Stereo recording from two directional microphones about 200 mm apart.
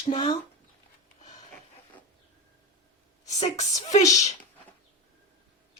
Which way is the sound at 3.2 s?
35° left (ahead or behind).